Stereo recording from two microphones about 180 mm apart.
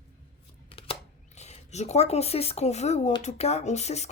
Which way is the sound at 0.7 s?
30° left (ahead or behind).